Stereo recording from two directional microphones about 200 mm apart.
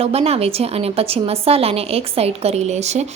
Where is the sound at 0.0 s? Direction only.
30° right (ahead or behind).